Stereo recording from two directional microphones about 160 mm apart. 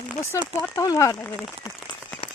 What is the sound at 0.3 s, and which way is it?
Speech, 15° left (ahead or behind).